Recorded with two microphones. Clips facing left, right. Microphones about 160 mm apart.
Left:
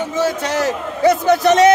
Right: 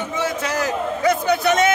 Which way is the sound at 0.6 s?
40° left (ahead or behind).